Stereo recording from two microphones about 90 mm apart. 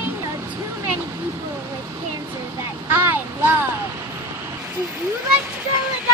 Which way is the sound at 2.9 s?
25° right (ahead or behind).